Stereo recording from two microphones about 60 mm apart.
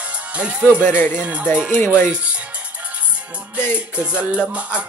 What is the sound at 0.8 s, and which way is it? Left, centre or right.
Speech, left.